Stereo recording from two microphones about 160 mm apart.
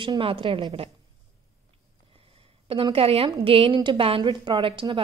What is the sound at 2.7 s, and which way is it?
A woman's voice, 35° right (ahead or behind).